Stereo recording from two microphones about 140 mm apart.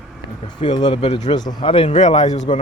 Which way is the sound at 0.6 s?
35° left (ahead or behind).